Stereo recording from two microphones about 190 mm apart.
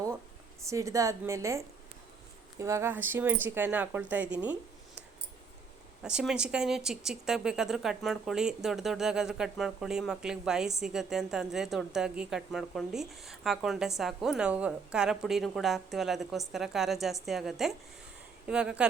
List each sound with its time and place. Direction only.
0.6 s speech: 15° right (ahead or behind)
6.0 s speech: 5° right (ahead or behind)